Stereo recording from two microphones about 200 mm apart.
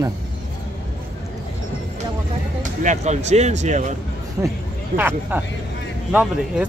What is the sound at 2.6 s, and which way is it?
Speech, 35° right (ahead or behind).